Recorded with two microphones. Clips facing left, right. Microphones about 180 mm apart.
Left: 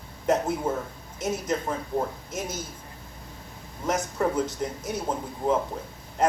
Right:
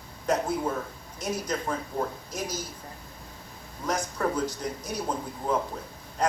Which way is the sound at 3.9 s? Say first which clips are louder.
Left 2 dB; 25° left (ahead or behind).